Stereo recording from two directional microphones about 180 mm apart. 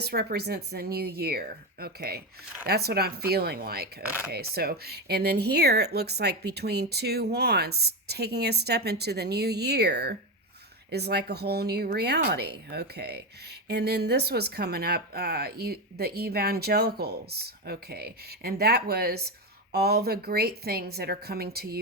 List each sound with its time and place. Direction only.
0.0 s speech: 60° right (ahead or behind)